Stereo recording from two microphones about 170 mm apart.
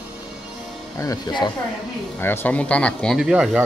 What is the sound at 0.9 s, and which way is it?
Speech, 20° left (ahead or behind).